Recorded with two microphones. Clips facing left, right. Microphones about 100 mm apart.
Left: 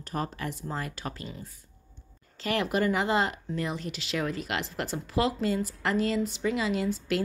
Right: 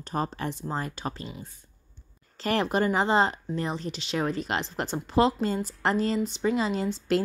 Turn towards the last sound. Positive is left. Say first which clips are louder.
# right 2 dB
turn(degrees=-30)  # may be behind; listen again after turning